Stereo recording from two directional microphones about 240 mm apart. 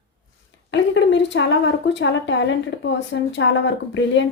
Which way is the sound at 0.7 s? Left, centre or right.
Left.